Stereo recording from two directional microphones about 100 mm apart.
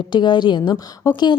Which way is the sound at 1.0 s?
35° left (ahead or behind).